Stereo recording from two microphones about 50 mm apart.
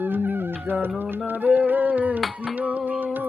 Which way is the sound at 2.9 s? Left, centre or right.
Right.